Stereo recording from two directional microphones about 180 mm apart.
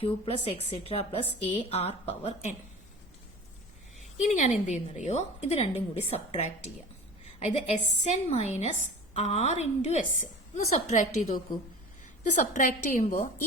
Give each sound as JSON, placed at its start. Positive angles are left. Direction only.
{"t": 0.0, "sound": "a woman's voice", "side_deg": 30}
{"t": 4.2, "sound": "a woman's voice", "side_deg": 40}
{"t": 12.5, "sound": "a woman's voice", "side_deg": 45}